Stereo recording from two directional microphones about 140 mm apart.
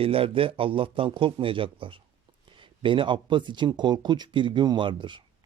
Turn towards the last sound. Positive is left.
turn(degrees=-35)  # may be behind; listen again after turning